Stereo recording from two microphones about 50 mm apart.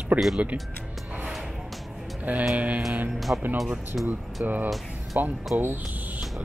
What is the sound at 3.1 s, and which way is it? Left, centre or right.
Speech, centre.